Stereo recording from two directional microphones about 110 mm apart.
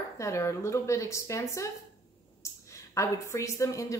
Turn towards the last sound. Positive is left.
turn(degrees=30)  # may be behind; listen again after turning